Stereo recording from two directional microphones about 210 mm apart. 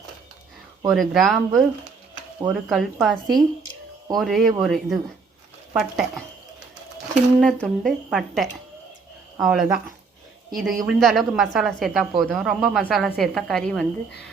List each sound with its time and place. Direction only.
0.9 s a woman's voice: centre (ahead or behind)
7.3 s a woman's voice: centre (ahead or behind)